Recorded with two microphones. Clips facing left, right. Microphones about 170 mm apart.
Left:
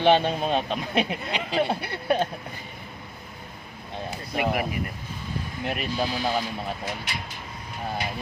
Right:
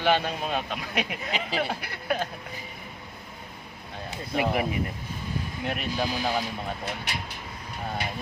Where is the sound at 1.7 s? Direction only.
30° left (ahead or behind).